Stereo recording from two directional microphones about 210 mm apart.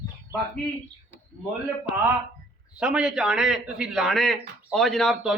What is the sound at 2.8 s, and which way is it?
A man's voice, 5° right (ahead or behind).